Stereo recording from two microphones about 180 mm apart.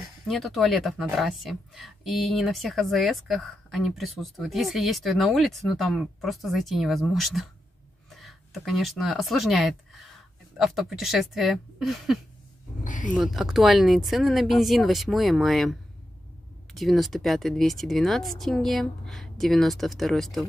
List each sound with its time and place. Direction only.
0.3 s speech: centre (ahead or behind)
12.8 s speech: 45° left (ahead or behind)
13.1 s speech: centre (ahead or behind)